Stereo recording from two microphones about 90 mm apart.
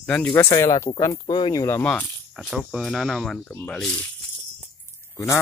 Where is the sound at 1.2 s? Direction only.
55° left (ahead or behind).